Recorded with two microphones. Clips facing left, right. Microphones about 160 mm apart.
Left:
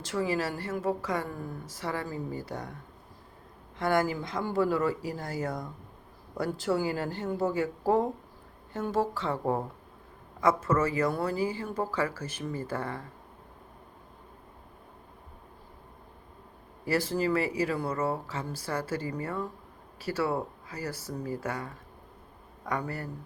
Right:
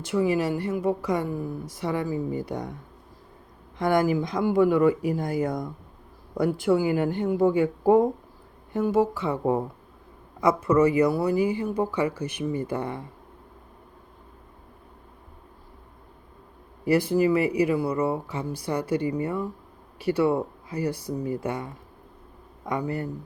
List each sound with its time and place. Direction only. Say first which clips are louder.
0.0 s a woman's voice: right 6 dB; 10° right (ahead or behind)
3.8 s a woman's voice: right 5 dB; 15° right (ahead or behind)
16.8 s a woman's voice: right 7 dB; 15° right (ahead or behind)